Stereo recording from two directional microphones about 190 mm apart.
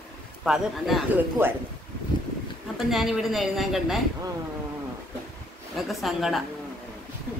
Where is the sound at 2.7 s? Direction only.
Centre (ahead or behind).